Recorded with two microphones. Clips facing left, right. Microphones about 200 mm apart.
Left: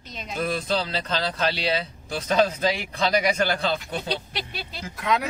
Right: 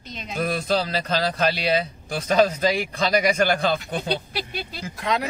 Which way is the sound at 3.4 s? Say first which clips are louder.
Right 3 dB; 50° right (ahead or behind).